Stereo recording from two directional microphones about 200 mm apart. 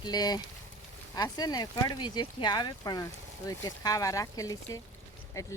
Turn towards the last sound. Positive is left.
turn(degrees=15)  # may be behind; listen again after turning